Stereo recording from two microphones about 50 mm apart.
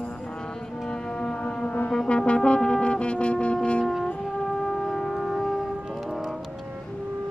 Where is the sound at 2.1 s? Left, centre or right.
Centre.